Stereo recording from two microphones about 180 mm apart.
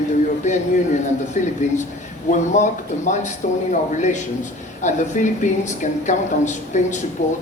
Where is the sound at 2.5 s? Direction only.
40° left (ahead or behind).